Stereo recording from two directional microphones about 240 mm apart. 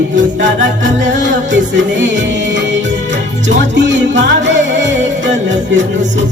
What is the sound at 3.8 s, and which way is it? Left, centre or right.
Music, right.